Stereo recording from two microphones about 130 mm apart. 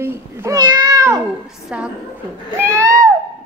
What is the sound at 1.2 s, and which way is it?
Speech, 5° right (ahead or behind).